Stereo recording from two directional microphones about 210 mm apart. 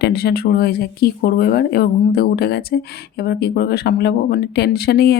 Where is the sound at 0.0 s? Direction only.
50° left (ahead or behind).